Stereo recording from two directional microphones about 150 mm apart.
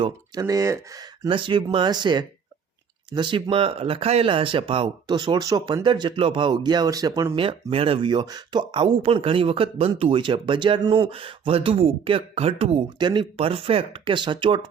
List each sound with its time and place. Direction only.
0.0 s speech: 25° right (ahead or behind)
1.3 s speech: 35° right (ahead or behind)
7.3 s speech: 40° right (ahead or behind)